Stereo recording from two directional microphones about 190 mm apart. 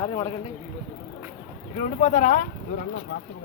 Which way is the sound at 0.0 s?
20° left (ahead or behind).